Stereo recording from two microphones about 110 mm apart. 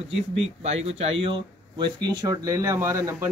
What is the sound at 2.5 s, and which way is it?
Speech, 25° right (ahead or behind).